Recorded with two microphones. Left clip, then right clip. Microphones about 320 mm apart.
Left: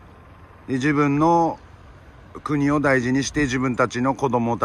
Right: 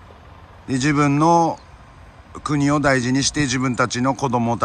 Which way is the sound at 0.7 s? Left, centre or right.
Centre.